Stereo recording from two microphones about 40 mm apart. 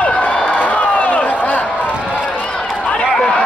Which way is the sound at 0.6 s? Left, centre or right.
Left.